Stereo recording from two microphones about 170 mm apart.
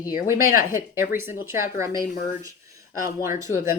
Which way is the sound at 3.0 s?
15° right (ahead or behind).